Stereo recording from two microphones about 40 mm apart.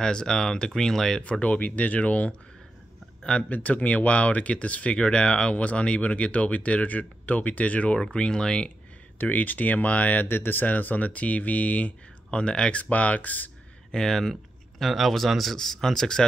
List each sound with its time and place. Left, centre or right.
0.0 s speech: centre
1.6 s speech: left
3.2 s a sound: left
3.4 s speech: left
5.5 s speech: left
8.0 s speech: centre
9.2 s speech: left
10.2 s speech: left
12.3 s speech: left
12.9 s speech: left
13.9 s speech: centre
15.5 s speech: centre